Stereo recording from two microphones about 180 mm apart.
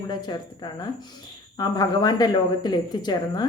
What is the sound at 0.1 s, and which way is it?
A woman's voice, 25° left (ahead or behind).